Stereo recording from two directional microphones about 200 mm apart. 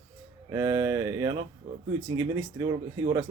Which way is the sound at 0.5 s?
15° right (ahead or behind).